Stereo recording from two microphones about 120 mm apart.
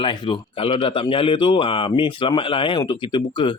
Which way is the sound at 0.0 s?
40° left (ahead or behind).